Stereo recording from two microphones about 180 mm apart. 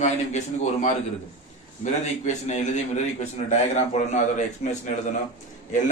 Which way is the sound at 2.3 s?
40° left (ahead or behind).